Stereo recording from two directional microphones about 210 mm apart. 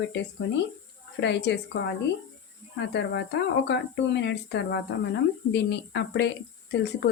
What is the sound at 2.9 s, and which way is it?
Speech, 55° left (ahead or behind).